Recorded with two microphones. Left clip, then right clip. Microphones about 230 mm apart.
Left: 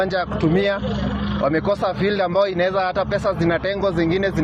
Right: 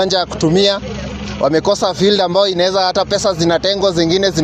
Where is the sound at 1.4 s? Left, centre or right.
Right.